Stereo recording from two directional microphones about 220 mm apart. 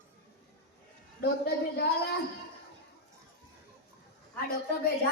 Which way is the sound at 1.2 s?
45° left (ahead or behind).